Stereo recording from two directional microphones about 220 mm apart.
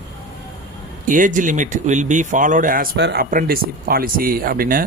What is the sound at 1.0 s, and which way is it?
Speech, 35° right (ahead or behind).